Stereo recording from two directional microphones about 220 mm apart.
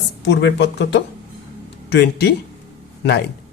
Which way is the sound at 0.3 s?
50° left (ahead or behind).